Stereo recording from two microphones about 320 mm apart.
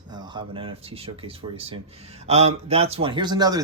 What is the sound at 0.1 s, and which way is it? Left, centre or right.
Speech, centre.